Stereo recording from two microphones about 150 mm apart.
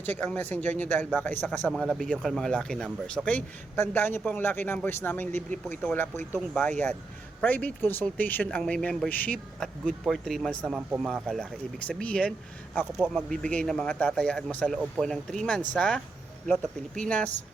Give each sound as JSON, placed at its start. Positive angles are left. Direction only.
{"t": 0.0, "sound": "speech", "side_deg": 10}
{"t": 1.6, "sound": "speech", "side_deg": 0}
{"t": 17.1, "sound": "speech", "side_deg": 10}